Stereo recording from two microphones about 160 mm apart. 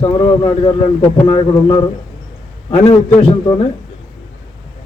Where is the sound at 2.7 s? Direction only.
40° left (ahead or behind).